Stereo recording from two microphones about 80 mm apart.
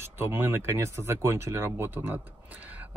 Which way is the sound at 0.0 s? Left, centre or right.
Right.